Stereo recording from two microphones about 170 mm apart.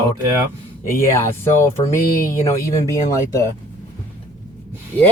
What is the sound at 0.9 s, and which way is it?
Speech, 15° left (ahead or behind).